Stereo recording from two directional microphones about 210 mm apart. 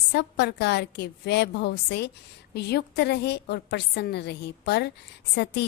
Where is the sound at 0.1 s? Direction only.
55° left (ahead or behind).